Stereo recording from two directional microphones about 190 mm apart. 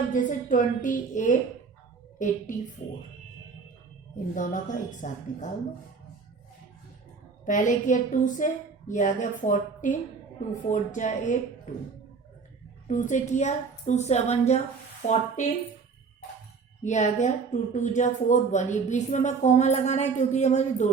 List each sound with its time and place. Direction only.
0.1 s a woman's voice: 45° left (ahead or behind)
4.4 s speech: 45° left (ahead or behind)
7.4 s a woman's voice: 40° left (ahead or behind)
12.9 s speech: 40° left (ahead or behind)
16.8 s speech: 40° left (ahead or behind)